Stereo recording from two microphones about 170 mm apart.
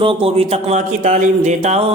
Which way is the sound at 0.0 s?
35° right (ahead or behind).